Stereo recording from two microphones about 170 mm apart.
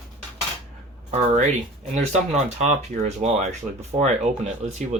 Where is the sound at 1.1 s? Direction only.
40° right (ahead or behind).